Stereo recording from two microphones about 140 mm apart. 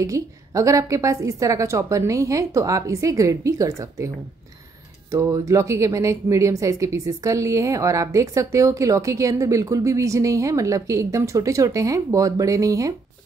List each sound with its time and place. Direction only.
0.0 s speech: 25° right (ahead or behind)
5.1 s speech: 20° right (ahead or behind)